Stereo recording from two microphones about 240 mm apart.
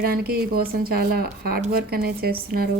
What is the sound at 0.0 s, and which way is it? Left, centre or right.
Speech, right.